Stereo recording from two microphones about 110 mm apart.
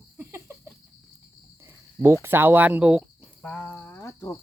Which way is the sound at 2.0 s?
25° right (ahead or behind).